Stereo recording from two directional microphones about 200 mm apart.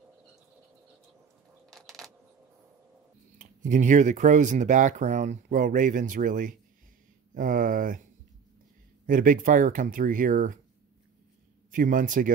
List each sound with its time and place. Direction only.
1.7 s a sound: centre (ahead or behind)
3.3 s speech: 40° right (ahead or behind)
9.0 s speech: 40° right (ahead or behind)
11.7 s speech: 40° right (ahead or behind)